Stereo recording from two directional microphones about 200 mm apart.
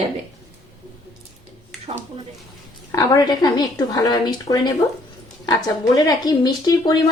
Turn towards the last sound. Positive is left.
turn(degrees=20)  # may be behind; listen again after turning